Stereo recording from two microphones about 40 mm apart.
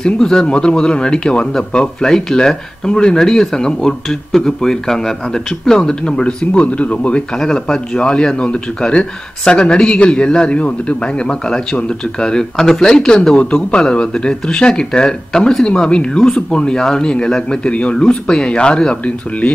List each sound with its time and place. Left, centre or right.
0.0 s a man's voice: centre; by 7.2 s left
7.3 s a man's voice: centre; by 11.3 s left
11.4 s a man's voice: centre